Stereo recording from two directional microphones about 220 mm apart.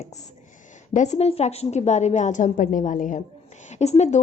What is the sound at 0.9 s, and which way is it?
Speech, 30° left (ahead or behind).